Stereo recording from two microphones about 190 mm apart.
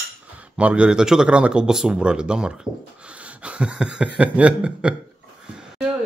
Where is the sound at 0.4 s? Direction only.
5° right (ahead or behind).